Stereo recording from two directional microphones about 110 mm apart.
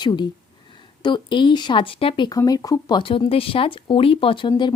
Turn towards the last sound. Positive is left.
turn(degrees=50)  # may be behind; listen again after turning